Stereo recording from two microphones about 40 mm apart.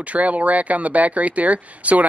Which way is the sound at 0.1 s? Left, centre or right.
Right.